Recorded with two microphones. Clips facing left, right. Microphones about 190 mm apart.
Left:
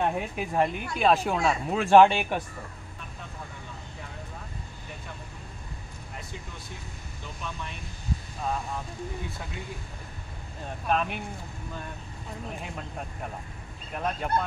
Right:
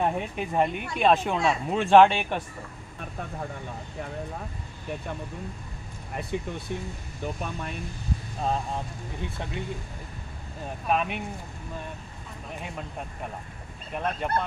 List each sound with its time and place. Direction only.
0.0 s speech: centre (ahead or behind)
6.3 s speech: 65° right (ahead or behind)
7.2 s speech: 50° right (ahead or behind)
8.4 s speech: 30° right (ahead or behind)
10.9 s speech: 5° right (ahead or behind)
13.9 s speech: centre (ahead or behind)